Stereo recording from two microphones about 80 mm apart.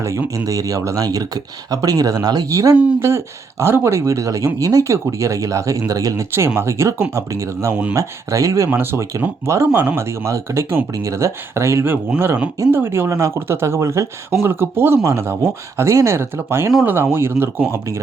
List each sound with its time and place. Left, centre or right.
0.3 s speech: right
6.3 s speech: right
7.7 s speech: centre
7.9 s speech: right
8.7 s speech: right